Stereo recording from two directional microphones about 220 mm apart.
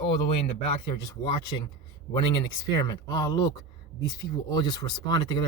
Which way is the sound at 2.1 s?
20° left (ahead or behind).